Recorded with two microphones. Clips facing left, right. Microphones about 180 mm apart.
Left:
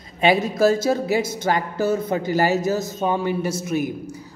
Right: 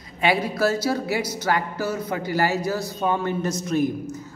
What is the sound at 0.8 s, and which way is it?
A man's voice, 20° left (ahead or behind).